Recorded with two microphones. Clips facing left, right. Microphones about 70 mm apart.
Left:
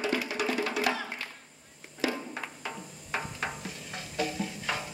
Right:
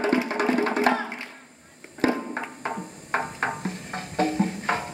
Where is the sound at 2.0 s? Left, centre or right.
Right.